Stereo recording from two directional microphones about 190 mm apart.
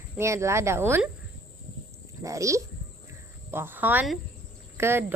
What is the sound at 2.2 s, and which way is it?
A woman's voice, 15° right (ahead or behind).